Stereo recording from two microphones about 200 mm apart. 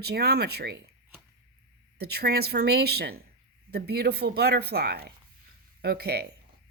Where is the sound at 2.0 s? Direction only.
55° right (ahead or behind).